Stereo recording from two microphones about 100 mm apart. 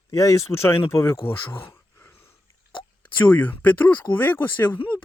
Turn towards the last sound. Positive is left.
turn(degrees=20)  # may be behind; listen again after turning